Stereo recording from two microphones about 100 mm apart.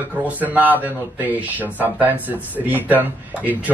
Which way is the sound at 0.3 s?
15° right (ahead or behind).